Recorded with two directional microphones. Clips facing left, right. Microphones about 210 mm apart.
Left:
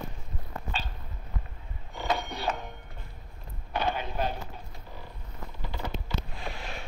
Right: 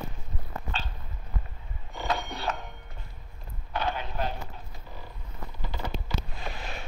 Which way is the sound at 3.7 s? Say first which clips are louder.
Left 1 dB; 15° left (ahead or behind).